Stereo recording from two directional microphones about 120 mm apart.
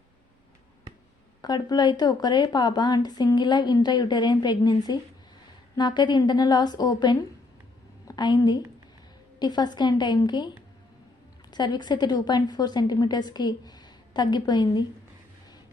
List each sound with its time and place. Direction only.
1.4 s a woman's voice: 35° left (ahead or behind)
11.5 s speech: 35° left (ahead or behind)